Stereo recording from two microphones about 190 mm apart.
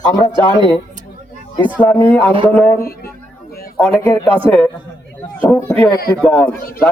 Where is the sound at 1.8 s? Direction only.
10° left (ahead or behind).